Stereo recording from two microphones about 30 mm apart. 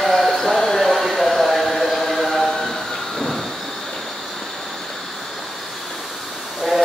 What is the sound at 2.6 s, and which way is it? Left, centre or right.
Train, centre.